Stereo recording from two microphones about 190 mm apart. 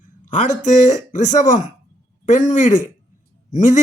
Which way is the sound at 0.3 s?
40° left (ahead or behind).